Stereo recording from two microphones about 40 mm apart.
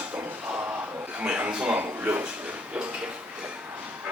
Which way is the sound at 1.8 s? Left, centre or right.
Right.